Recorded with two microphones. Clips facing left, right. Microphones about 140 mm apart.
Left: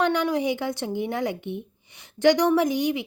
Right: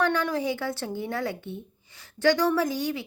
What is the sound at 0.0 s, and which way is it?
A woman's voice, 15° left (ahead or behind).